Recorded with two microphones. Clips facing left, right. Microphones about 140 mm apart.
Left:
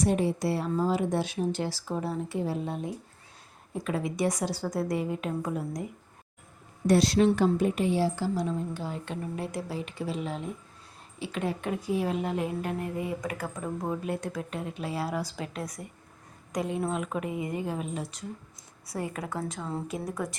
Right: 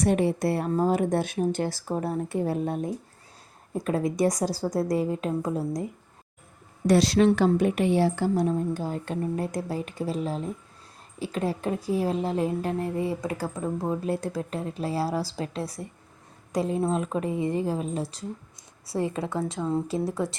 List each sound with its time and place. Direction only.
0.0 s a woman's voice: 60° right (ahead or behind); by 5.8 s 35° right (ahead or behind)
6.8 s a woman's voice: 90° right; by 20.3 s 30° right (ahead or behind)